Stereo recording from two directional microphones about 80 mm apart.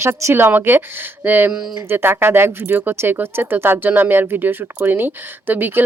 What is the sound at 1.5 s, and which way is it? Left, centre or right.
Speech, centre.